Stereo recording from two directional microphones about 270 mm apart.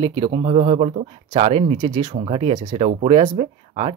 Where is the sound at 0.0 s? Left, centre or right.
Centre.